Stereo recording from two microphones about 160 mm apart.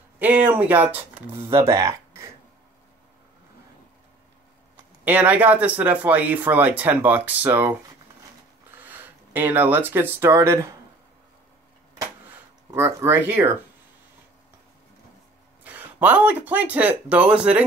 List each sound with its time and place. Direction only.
0.2 s speech: 10° right (ahead or behind)
5.0 s speech: 10° right (ahead or behind)
8.7 s speech: 10° right (ahead or behind)
12.7 s speech: 15° right (ahead or behind)
15.6 s speech: 10° right (ahead or behind)